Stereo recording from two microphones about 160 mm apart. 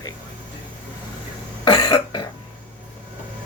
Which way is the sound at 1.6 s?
25° left (ahead or behind).